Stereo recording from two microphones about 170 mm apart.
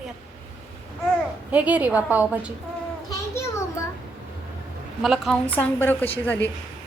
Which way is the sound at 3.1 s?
15° left (ahead or behind).